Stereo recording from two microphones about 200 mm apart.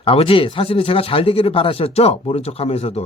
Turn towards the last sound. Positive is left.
turn(degrees=30)  # may be behind; listen again after turning